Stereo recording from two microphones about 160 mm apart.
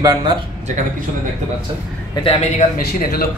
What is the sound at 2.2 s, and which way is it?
Speech, 35° left (ahead or behind).